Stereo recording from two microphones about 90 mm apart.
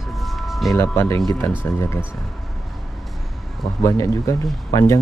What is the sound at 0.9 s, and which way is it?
Speech, 30° left (ahead or behind).